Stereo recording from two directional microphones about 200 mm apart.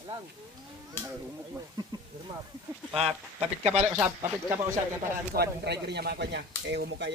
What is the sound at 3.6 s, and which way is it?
Speech, 35° right (ahead or behind).